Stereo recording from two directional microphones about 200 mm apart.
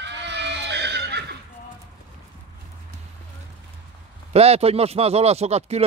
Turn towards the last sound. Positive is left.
turn(degrees=-30)  # may be behind; listen again after turning